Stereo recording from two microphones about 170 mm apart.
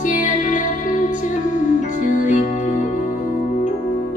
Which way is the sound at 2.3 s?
50° left (ahead or behind).